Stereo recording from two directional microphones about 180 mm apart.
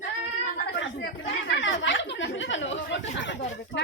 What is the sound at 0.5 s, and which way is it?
Chatter, 75° left (ahead or behind).